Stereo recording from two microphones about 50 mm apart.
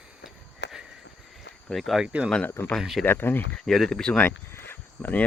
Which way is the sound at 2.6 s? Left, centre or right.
Left.